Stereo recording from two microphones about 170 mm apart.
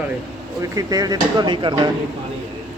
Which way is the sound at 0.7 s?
20° right (ahead or behind).